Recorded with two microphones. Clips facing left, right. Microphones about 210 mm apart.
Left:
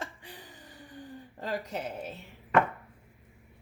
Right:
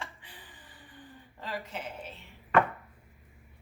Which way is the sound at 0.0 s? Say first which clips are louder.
Left 4 dB; 45° left (ahead or behind).